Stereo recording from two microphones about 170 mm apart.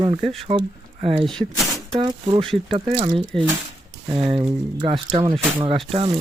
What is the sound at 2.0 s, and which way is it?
Speech, 30° right (ahead or behind).